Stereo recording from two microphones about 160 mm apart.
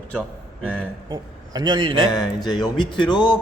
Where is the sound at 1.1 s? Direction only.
25° right (ahead or behind).